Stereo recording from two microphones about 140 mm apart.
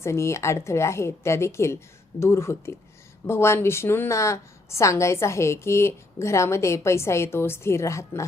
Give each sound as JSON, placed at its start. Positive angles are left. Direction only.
{"t": 0.0, "sound": "a woman's voice", "side_deg": 20}